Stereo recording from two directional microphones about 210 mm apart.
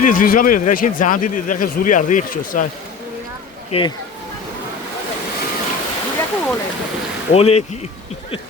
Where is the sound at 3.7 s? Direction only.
25° left (ahead or behind).